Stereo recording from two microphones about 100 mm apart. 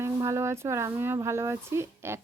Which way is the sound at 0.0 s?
30° right (ahead or behind).